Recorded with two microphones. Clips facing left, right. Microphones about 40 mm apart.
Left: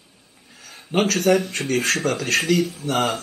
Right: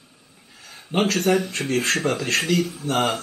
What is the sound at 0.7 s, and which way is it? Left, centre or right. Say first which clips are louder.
Speech: left 1 dB; centre.